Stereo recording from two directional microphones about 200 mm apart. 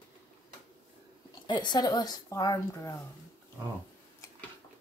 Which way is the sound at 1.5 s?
20° left (ahead or behind).